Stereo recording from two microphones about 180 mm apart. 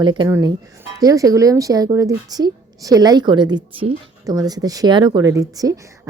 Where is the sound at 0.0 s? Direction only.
25° right (ahead or behind).